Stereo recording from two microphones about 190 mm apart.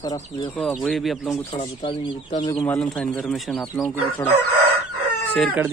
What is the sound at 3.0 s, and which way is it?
Speech, 5° left (ahead or behind).